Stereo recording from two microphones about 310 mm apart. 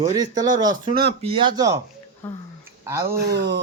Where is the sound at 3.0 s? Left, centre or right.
Right.